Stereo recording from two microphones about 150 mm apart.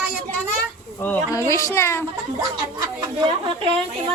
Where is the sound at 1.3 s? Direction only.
20° left (ahead or behind).